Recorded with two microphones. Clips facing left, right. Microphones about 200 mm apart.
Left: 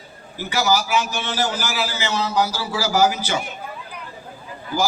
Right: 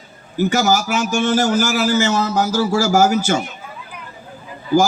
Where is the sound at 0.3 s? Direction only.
45° right (ahead or behind).